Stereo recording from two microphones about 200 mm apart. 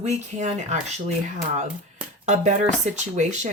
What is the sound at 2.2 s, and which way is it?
Speech, 40° right (ahead or behind).